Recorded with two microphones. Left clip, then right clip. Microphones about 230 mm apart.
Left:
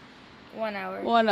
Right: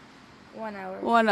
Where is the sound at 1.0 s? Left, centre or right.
Centre.